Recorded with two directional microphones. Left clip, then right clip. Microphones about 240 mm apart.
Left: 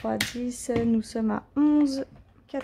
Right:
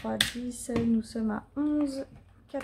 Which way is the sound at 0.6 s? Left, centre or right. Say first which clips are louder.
Left 3 dB; left.